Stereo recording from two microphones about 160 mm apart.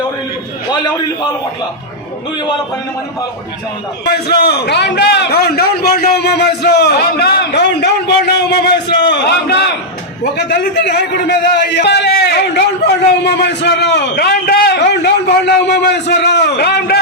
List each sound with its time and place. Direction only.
0.7 s a man's voice: 25° left (ahead or behind)
4.0 s a man's voice: 85° left